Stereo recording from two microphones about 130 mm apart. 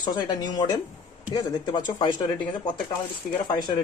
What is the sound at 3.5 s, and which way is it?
Speech, 35° left (ahead or behind).